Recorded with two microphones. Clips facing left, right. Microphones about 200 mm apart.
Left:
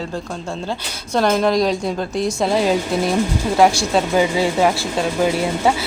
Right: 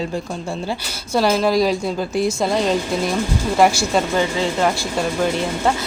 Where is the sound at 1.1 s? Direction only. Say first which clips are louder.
Even; 5° right (ahead or behind).